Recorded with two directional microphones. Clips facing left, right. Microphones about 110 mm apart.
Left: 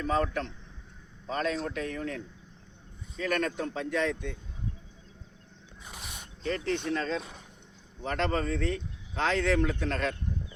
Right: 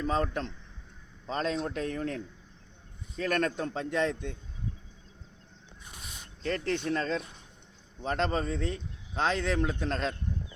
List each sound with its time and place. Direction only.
0.0 s a man's voice: 25° right (ahead or behind)
3.8 s a man's voice: 30° right (ahead or behind)
5.9 s a sound: 75° left (ahead or behind)
6.4 s speech: 45° right (ahead or behind)
8.0 s a man's voice: 20° right (ahead or behind)